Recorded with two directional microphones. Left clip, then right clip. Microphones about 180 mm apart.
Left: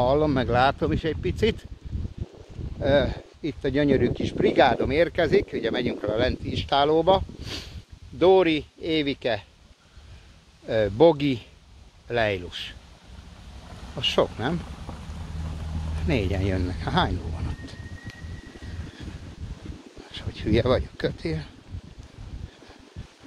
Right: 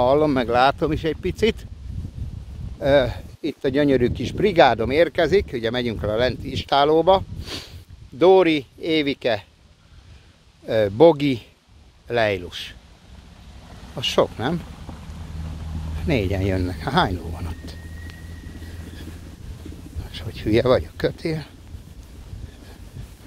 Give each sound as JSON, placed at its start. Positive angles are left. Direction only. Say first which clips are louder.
{"t": 0.0, "sound": "speech", "louder": "right 4 dB", "side_deg": -50}
{"t": 2.8, "sound": "speech", "louder": "right 4 dB", "side_deg": -50}
{"t": 10.7, "sound": "speech", "louder": "right 4 dB", "side_deg": -35}
{"t": 13.9, "sound": "speech", "louder": "right 3 dB", "side_deg": -30}
{"t": 14.9, "sound": "boat", "louder": "even", "side_deg": 20}
{"t": 16.1, "sound": "speech", "louder": "right 4 dB", "side_deg": -35}
{"t": 20.1, "sound": "speech", "louder": "right 4 dB", "side_deg": -45}